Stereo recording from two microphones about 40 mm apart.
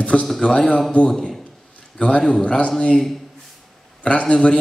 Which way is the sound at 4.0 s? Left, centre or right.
Left.